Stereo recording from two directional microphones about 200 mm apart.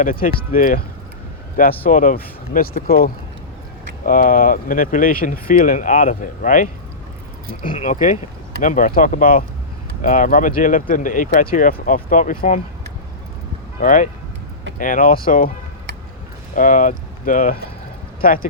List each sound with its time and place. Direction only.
0.0 s speech: 45° left (ahead or behind)
1.8 s speech: 40° left (ahead or behind)
13.8 s speech: 40° left (ahead or behind)
16.6 s speech: 40° left (ahead or behind)